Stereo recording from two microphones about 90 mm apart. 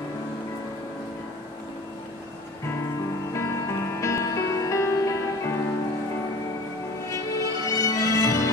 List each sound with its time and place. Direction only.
3.3 s music: 35° left (ahead or behind)
7.1 s music: 40° left (ahead or behind)